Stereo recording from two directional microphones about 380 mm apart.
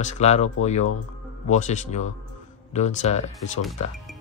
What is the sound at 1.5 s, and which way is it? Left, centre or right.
Speech, centre.